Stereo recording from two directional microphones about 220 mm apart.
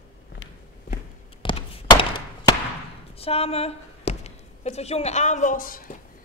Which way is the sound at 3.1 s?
25° left (ahead or behind).